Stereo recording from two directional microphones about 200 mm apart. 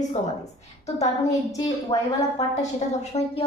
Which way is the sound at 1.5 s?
15° left (ahead or behind).